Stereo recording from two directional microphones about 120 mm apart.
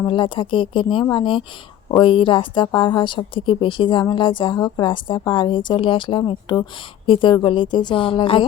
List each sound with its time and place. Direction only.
0.0 s a woman's voice: 45° left (ahead or behind)